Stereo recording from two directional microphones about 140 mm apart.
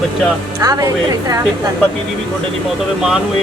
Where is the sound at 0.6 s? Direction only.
25° right (ahead or behind).